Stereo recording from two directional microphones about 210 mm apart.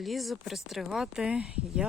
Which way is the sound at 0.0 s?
Centre (ahead or behind).